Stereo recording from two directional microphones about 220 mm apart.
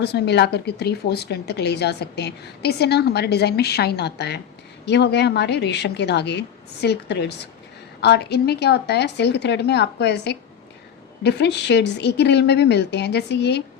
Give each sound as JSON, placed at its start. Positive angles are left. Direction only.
{"t": 0.0, "sound": "speech", "side_deg": 50}